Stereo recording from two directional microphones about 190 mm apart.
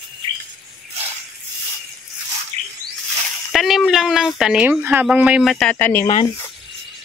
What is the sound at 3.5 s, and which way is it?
Speech, centre (ahead or behind).